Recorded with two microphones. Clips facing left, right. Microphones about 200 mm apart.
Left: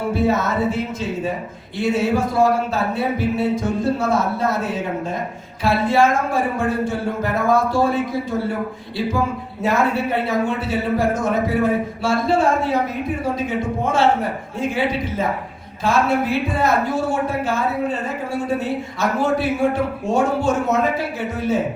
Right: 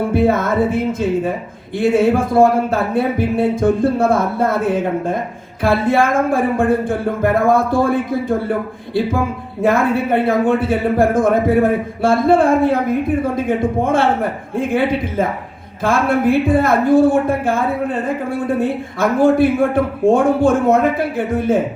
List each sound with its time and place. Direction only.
0.1 s speech: 55° right (ahead or behind)
9.6 s speech: 55° right (ahead or behind)
15.8 s speech: 55° right (ahead or behind)